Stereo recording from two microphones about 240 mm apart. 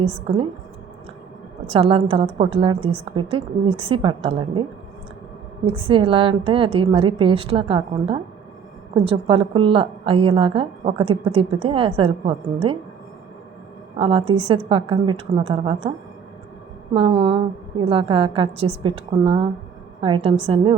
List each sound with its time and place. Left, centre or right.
0.0 s a woman's voice: right
1.6 s a woman's voice: right
5.6 s a woman's voice: right
13.9 s a woman's voice: right
16.9 s a woman's voice: right